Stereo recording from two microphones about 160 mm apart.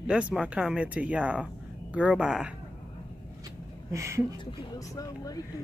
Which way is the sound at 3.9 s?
20° right (ahead or behind).